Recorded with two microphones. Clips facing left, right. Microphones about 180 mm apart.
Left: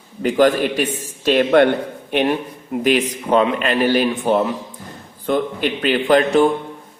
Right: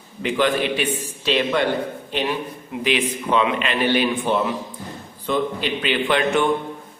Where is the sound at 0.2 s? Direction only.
45° left (ahead or behind).